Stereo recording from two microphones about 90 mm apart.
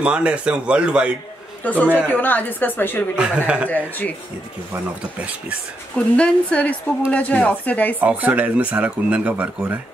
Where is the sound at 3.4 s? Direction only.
15° right (ahead or behind).